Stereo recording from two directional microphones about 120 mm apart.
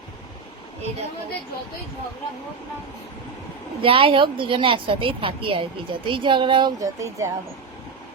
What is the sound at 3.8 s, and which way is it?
A woman's voice, 50° right (ahead or behind).